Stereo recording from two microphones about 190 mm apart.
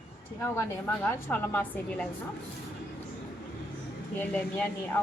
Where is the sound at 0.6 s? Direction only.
10° left (ahead or behind).